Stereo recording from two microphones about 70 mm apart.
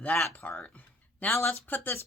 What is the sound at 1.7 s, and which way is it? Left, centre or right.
Speech, left.